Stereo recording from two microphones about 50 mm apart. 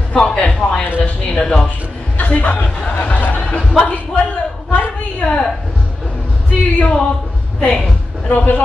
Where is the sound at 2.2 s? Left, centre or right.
Left.